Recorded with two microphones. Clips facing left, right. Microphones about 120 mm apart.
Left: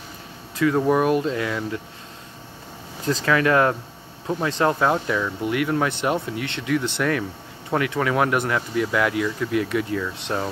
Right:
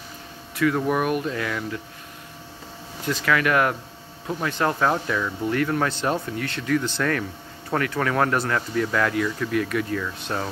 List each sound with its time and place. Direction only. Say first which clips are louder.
0.6 s speech: left 3 dB; 25° left (ahead or behind)
3.1 s speech: left 2 dB; 30° left (ahead or behind)